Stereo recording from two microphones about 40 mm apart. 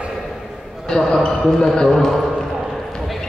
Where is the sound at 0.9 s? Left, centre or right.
Centre.